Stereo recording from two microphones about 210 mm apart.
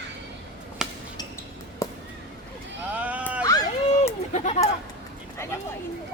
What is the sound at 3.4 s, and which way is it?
Run, 15° left (ahead or behind).